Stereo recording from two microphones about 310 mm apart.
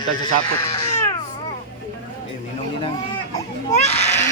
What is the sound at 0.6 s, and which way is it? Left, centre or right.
Cat, centre.